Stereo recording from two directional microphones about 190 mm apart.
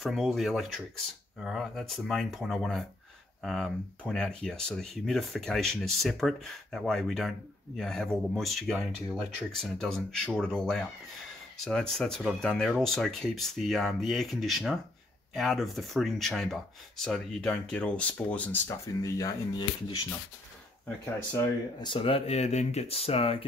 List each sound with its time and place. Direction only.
0.0 s speech: centre (ahead or behind); by 19.3 s 15° left (ahead or behind)
21.8 s speech: 25° left (ahead or behind)